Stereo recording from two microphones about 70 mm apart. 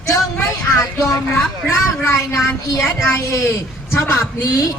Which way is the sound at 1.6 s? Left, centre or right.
Left.